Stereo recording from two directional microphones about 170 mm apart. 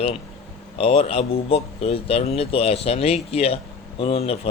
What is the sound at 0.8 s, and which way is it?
Speech, 35° left (ahead or behind).